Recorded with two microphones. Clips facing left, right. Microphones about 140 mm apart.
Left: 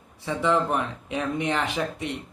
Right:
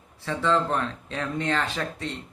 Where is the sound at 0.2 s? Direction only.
15° left (ahead or behind).